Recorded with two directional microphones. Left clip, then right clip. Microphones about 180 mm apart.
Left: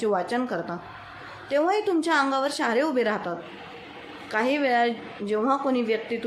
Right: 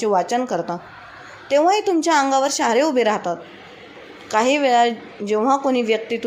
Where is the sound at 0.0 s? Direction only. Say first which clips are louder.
Right 6 dB; 20° right (ahead or behind).